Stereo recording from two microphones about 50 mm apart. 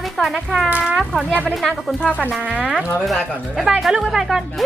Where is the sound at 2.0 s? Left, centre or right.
Left.